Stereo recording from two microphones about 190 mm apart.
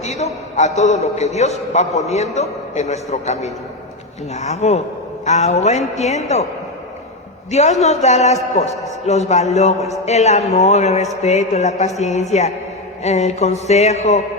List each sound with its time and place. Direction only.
0.0 s a man's voice: 35° left (ahead or behind)
7.5 s a man's voice: 35° left (ahead or behind)